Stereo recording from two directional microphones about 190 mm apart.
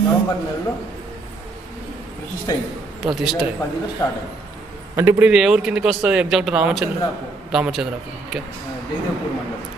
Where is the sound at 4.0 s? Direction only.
20° left (ahead or behind).